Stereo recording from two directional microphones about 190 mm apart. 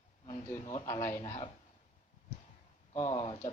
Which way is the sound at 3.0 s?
30° left (ahead or behind).